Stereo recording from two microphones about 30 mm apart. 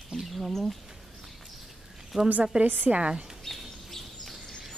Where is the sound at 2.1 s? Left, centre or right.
Centre.